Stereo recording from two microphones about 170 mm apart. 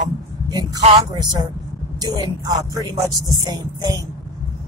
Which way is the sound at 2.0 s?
25° right (ahead or behind).